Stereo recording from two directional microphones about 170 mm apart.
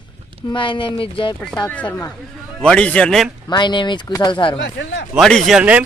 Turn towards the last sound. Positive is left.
turn(degrees=-5)  # may be behind; listen again after turning